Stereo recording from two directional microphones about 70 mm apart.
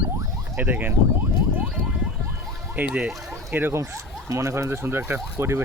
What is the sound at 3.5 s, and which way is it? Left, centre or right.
Speech, right.